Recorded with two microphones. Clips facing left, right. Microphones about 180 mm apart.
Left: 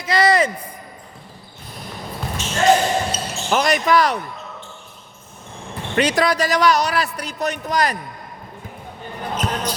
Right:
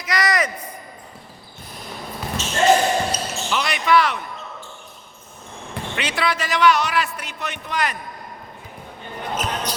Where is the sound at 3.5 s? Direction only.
45° left (ahead or behind).